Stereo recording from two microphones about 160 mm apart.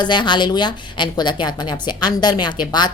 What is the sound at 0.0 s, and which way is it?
A woman's voice, 30° left (ahead or behind).